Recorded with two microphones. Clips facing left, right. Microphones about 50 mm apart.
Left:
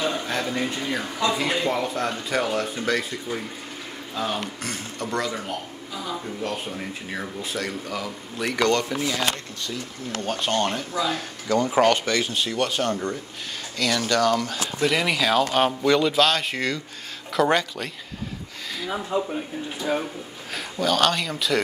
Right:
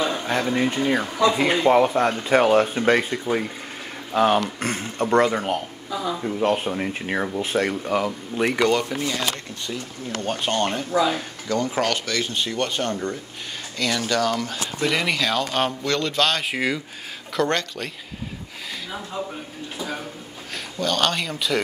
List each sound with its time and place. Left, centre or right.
0.3 s speech: centre
4.1 s speech: right
4.6 s speech: right
6.4 s speech: right
8.5 s speech: centre
8.8 s speech: centre
10.2 s speech: centre
12.2 s speech: centre
17.3 s speech: centre
20.5 s speech: centre